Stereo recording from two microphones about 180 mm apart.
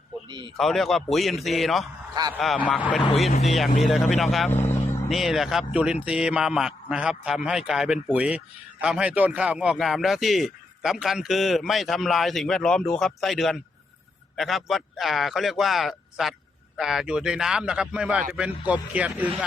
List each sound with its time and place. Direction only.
0.3 s speech: 25° right (ahead or behind)
0.5 s a man's voice: centre (ahead or behind)